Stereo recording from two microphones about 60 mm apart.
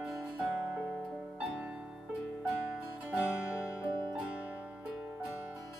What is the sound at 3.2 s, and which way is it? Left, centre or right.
Music, centre.